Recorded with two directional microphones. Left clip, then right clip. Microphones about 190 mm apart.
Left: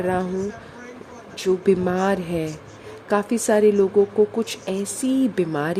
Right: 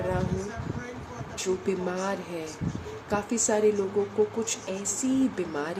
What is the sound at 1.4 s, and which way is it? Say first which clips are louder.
Speech: left 10 dB; 40° left (ahead or behind).